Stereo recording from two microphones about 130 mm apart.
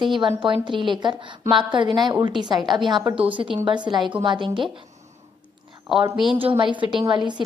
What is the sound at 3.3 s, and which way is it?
A woman's voice, 40° right (ahead or behind).